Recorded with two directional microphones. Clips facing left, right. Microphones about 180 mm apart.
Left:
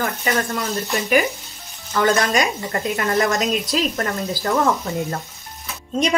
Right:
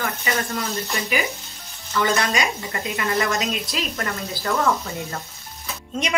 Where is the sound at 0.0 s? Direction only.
45° left (ahead or behind).